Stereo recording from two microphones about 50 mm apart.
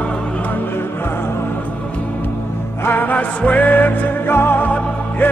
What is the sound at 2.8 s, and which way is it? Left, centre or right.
Music, left.